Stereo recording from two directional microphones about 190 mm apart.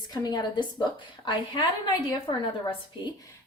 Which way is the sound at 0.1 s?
20° left (ahead or behind).